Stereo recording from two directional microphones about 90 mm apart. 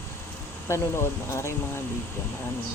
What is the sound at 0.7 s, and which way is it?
Speech, 30° left (ahead or behind).